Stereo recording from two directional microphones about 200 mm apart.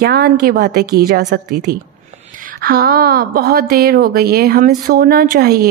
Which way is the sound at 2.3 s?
40° right (ahead or behind).